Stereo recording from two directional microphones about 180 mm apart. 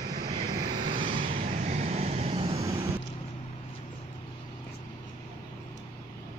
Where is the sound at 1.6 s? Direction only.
40° right (ahead or behind).